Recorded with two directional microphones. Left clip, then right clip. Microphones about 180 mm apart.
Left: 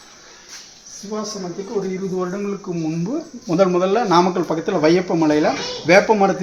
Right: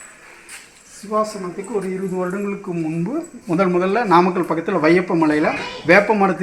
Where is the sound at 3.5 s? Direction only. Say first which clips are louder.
Left 2 dB; 15° left (ahead or behind).